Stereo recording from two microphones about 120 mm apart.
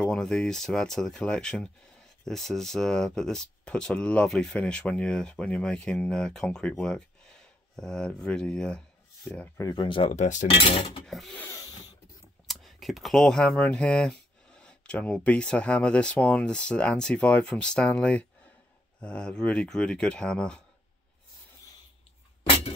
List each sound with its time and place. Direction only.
0.0 s speech: 5° left (ahead or behind)
9.6 s speech: 30° left (ahead or behind)
9.8 s cutlery: 45° left (ahead or behind)
10.1 s cutlery: 85° left
10.6 s cutlery: 45° left (ahead or behind)
11.1 s speech: centre (ahead or behind)
11.3 s a sound: 25° left (ahead or behind)
12.4 s speech: centre (ahead or behind)